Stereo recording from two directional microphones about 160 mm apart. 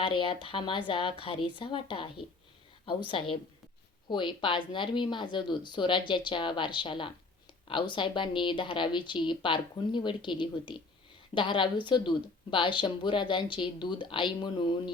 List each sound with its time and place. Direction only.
0.0 s speech: 35° left (ahead or behind)